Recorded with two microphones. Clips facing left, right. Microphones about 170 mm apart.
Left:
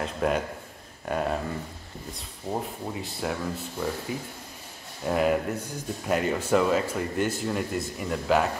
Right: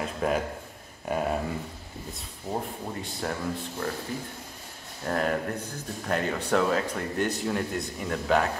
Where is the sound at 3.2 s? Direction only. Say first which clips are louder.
Left 1 dB; 5° left (ahead or behind).